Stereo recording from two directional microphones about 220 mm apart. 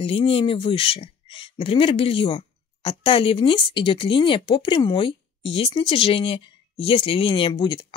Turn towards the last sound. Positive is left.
turn(degrees=20)  # may be behind; listen again after turning